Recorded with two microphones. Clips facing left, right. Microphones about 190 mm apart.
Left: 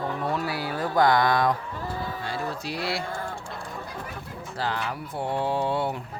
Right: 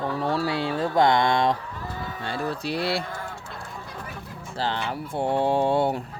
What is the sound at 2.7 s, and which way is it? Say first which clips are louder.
Mantra: right 6 dB; 30° right (ahead or behind).